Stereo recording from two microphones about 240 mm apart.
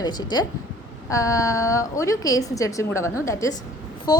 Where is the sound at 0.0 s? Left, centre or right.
Centre.